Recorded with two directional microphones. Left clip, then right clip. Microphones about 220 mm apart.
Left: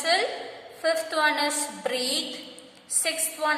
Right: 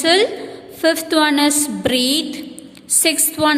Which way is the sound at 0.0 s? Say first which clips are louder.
Right 9 dB; 40° right (ahead or behind).